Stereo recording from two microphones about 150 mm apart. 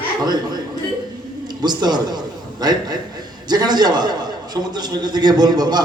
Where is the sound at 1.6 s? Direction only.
30° right (ahead or behind).